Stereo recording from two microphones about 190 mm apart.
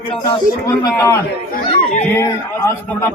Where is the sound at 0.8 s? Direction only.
15° left (ahead or behind).